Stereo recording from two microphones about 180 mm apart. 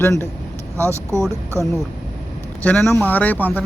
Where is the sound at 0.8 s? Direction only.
15° right (ahead or behind).